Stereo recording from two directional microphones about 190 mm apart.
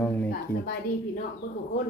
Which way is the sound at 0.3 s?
55° left (ahead or behind).